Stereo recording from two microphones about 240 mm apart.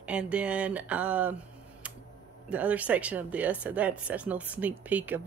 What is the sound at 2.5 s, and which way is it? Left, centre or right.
Speech, centre.